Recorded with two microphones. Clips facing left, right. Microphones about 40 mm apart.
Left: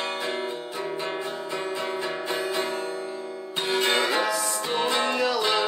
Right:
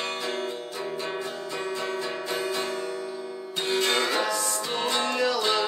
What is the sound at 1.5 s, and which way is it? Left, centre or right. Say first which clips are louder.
Music: even; centre.